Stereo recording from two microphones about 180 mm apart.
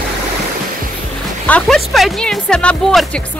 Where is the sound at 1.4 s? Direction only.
5° left (ahead or behind).